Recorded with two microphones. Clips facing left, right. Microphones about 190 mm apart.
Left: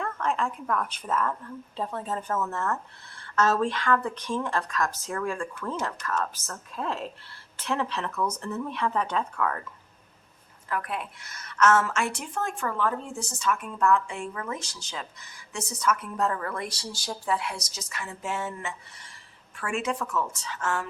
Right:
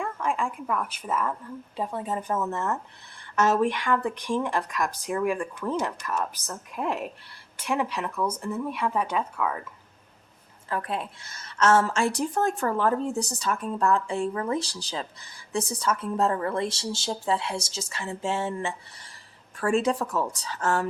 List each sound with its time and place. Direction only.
0.0 s speech: 10° right (ahead or behind)
10.7 s a woman's voice: 30° right (ahead or behind)